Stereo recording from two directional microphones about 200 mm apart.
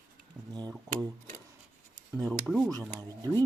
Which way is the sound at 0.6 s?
20° right (ahead or behind).